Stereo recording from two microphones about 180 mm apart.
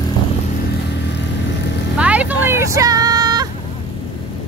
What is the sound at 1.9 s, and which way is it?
Vehicle, 5° right (ahead or behind).